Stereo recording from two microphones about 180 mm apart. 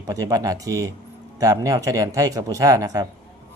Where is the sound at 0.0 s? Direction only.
20° right (ahead or behind).